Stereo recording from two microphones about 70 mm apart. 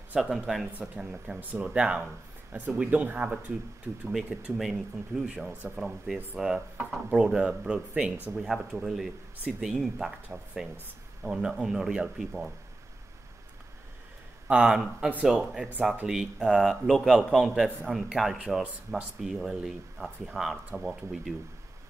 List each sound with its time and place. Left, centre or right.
0.1 s speech: centre; by 3.5 s right
4.1 s speech: centre
10.2 s speech: centre
14.5 s speech: centre